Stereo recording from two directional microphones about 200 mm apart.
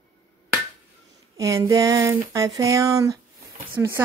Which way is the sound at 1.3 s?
15° right (ahead or behind).